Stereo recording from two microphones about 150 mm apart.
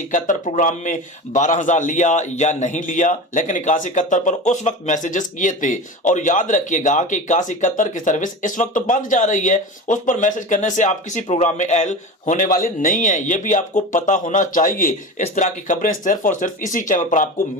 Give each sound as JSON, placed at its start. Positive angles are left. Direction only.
{"t": 0.1, "sound": "a man's voice", "side_deg": 55}